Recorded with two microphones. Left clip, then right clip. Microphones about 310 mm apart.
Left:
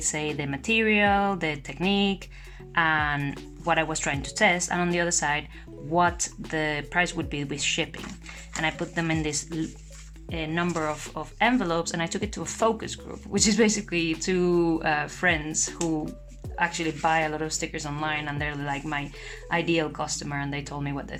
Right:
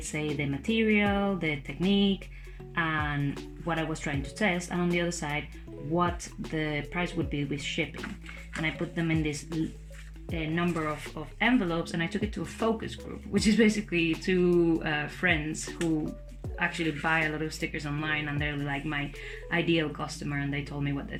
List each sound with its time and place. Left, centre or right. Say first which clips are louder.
0.6 s speech: left 5 dB; left
2.7 s speech: left 6 dB; left
9.5 s speech: left 1 dB; centre
10.3 s speech: left 3 dB; left